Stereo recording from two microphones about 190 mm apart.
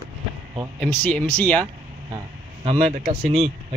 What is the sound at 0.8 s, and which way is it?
Speech, 5° left (ahead or behind).